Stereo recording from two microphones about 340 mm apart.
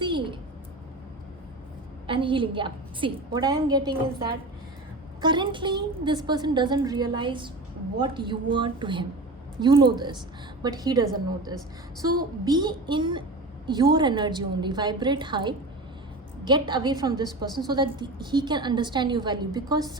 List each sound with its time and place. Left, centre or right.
0.0 s a sound: centre
2.0 s a woman's voice: centre
5.2 s a woman's voice: centre
12.5 s a woman's voice: centre